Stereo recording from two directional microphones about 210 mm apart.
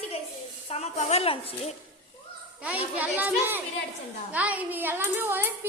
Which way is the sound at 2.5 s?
5° right (ahead or behind).